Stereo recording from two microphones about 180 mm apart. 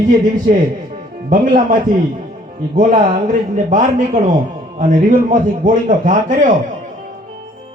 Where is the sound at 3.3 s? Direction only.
45° right (ahead or behind).